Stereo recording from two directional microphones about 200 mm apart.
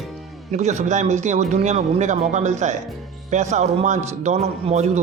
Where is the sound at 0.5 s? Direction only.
35° right (ahead or behind).